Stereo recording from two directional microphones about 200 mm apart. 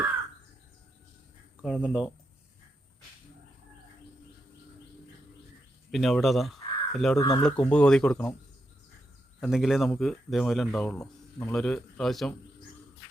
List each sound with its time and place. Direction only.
1.6 s speech: centre (ahead or behind)
5.9 s speech: centre (ahead or behind)
9.4 s speech: centre (ahead or behind)
10.9 s speech: 15° left (ahead or behind)
11.5 s speech: 5° left (ahead or behind)